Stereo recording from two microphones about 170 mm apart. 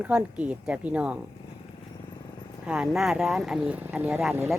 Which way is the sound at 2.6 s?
5° right (ahead or behind).